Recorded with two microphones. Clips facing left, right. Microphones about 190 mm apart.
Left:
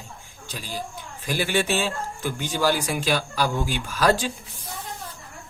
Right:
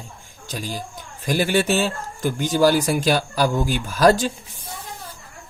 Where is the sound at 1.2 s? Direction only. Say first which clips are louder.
Right 4 dB; 45° right (ahead or behind).